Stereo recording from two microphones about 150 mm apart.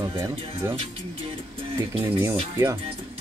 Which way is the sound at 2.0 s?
15° right (ahead or behind).